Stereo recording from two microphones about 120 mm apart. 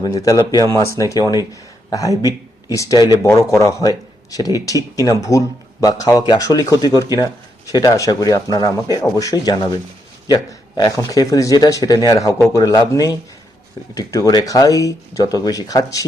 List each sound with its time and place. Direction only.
0.0 s speech: 30° left (ahead or behind)